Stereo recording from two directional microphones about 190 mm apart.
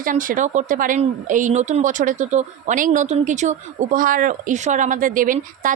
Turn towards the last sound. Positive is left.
turn(degrees=-45)  # may be behind; listen again after turning